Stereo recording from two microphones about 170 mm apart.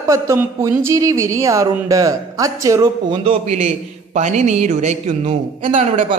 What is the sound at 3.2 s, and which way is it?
A man's voice, 40° right (ahead or behind).